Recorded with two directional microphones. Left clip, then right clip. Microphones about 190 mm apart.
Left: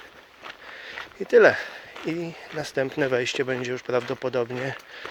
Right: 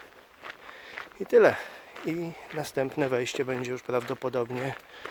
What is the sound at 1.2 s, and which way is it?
Speech, 10° right (ahead or behind).